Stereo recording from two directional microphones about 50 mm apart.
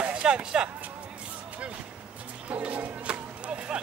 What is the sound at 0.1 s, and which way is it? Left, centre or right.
Speech, centre.